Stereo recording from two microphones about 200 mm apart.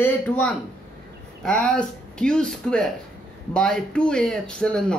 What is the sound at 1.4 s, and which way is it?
Speech, 5° left (ahead or behind).